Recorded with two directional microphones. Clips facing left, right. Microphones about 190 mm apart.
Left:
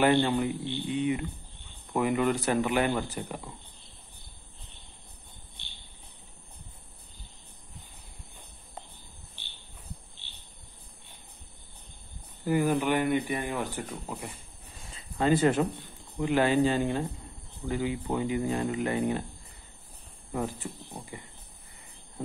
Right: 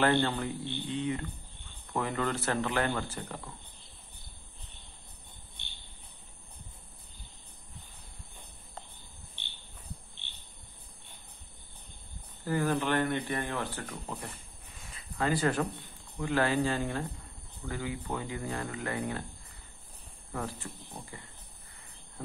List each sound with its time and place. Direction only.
0.0 s speech: 15° left (ahead or behind)
12.4 s speech: 15° left (ahead or behind)
14.9 s a sound: 25° left (ahead or behind)
16.2 s speech: 20° left (ahead or behind)
20.3 s speech: 20° left (ahead or behind)